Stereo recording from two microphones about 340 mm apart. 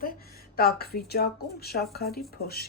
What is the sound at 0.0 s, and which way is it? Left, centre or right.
A woman's voice, left.